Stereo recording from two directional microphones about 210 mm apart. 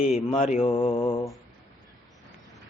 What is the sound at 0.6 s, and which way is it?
Mantra, 25° left (ahead or behind).